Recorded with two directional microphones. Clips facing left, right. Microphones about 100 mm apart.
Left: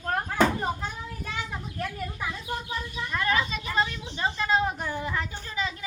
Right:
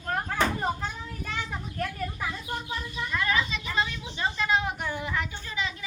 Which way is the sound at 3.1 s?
35° left (ahead or behind).